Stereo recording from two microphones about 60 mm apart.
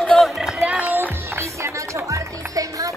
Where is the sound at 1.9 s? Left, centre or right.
Right.